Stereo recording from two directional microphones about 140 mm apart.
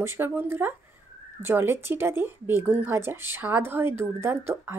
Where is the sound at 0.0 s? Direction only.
15° right (ahead or behind).